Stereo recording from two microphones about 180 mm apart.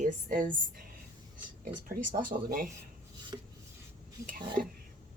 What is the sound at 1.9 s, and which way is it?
Speech, 50° right (ahead or behind).